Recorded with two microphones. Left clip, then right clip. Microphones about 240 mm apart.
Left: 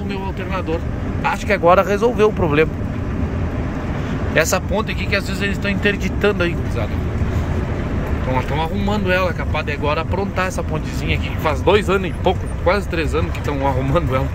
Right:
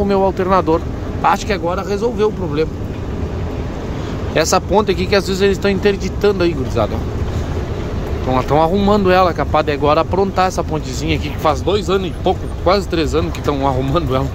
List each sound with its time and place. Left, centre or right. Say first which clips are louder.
0.1 s speech: right 11 dB; centre
1.5 s speech: left 5 dB; centre
4.3 s speech: right 3 dB; centre
8.4 s speech: right 11 dB; centre